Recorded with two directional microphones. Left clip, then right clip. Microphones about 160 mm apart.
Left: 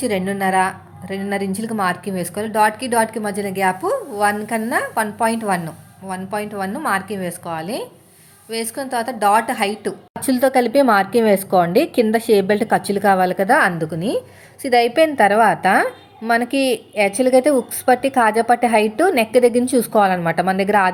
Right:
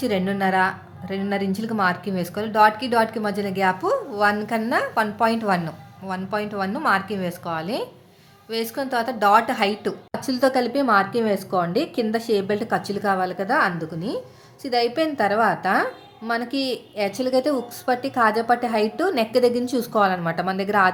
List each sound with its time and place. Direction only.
0.0 s a woman's voice: 10° left (ahead or behind)
10.2 s a woman's voice: 20° left (ahead or behind)